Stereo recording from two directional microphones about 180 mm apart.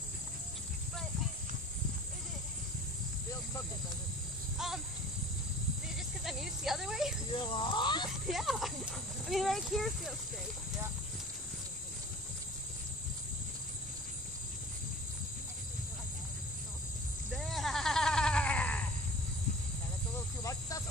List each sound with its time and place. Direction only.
4.6 s speech: centre (ahead or behind)
5.9 s speech: centre (ahead or behind)
7.3 s speech: 25° left (ahead or behind)
8.3 s speech: centre (ahead or behind)
17.3 s sheep: centre (ahead or behind)
20.2 s cricket: 15° left (ahead or behind)